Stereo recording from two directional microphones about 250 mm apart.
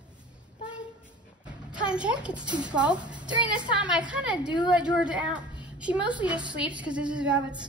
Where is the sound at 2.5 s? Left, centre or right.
Centre.